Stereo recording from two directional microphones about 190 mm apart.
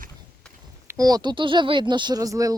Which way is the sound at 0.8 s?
15° right (ahead or behind).